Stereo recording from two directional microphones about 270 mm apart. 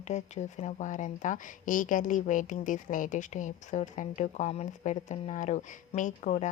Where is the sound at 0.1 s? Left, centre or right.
Left.